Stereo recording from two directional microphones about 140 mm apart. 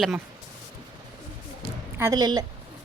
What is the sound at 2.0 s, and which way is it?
Speech, 25° right (ahead or behind).